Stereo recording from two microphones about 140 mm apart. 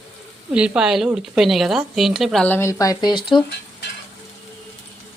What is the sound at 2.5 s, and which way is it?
Speech, 15° left (ahead or behind).